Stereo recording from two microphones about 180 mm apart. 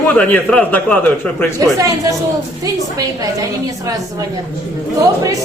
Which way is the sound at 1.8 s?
20° right (ahead or behind).